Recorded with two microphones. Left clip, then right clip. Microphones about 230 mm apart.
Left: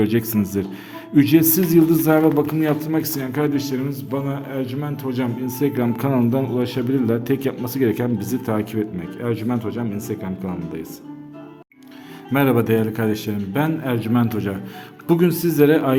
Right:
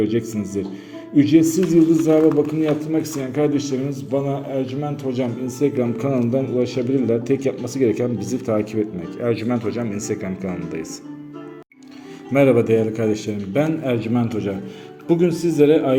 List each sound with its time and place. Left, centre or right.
0.0 s a man's voice: left
12.3 s a man's voice: centre